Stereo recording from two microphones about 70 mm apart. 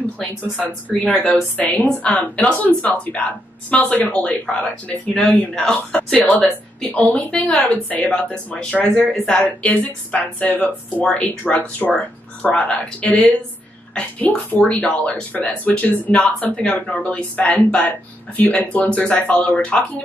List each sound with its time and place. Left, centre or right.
1.1 s speech: centre
1.6 s speech: left
5.5 s speech: centre
6.1 s speech: left
9.1 s speech: centre
9.4 s speech: left